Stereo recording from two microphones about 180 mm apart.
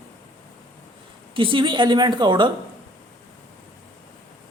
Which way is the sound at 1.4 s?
30° right (ahead or behind).